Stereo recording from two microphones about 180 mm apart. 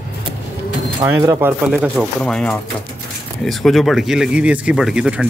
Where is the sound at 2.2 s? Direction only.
5° left (ahead or behind).